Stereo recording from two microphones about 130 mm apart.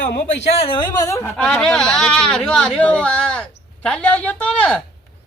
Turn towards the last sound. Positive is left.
turn(degrees=10)  # may be behind; listen again after turning